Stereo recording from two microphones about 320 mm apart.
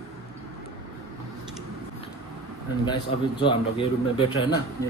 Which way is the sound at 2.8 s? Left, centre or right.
Centre.